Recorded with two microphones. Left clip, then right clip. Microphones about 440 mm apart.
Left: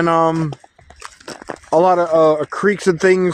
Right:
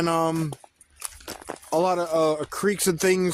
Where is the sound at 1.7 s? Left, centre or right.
Right.